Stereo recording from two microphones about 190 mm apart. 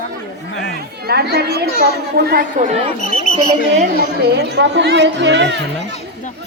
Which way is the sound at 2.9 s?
45° left (ahead or behind).